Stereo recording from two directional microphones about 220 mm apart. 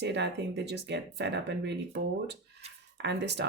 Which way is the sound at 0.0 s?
50° right (ahead or behind).